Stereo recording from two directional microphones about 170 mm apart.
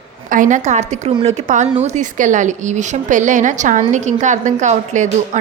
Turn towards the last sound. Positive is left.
turn(degrees=-45)  # may be behind; listen again after turning